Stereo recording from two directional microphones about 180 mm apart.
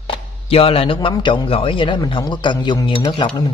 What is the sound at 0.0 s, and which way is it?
Speech, 30° left (ahead or behind).